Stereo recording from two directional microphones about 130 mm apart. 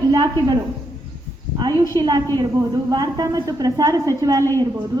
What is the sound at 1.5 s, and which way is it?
A woman's voice, 30° right (ahead or behind).